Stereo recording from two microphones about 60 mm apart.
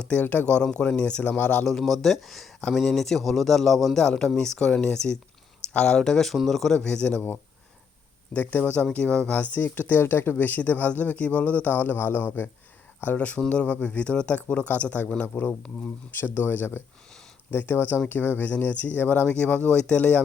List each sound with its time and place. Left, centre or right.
0.1 s speech: left
1.6 s a man's voice: centre
4.0 s speech: centre
6.7 s speech: centre
8.5 s speech: left
9.4 s speech: left
10.0 s speech: left
13.1 s speech: left
20.0 s speech: left